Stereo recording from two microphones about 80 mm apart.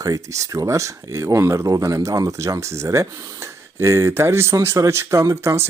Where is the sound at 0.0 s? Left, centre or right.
Right.